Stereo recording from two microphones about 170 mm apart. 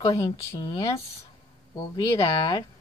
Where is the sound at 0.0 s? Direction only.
20° left (ahead or behind).